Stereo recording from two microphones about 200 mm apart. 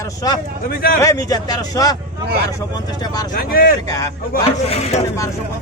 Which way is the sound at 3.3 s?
50° left (ahead or behind).